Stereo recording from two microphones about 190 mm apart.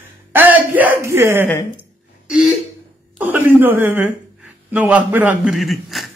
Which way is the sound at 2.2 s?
5° right (ahead or behind).